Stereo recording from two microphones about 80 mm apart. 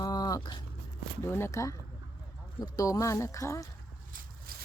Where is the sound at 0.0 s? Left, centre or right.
Left.